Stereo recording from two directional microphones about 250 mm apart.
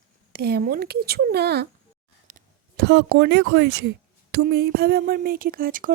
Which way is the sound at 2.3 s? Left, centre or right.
Right.